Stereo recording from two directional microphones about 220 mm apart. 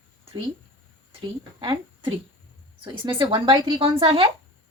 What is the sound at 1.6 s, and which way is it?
A woman's voice, 20° right (ahead or behind).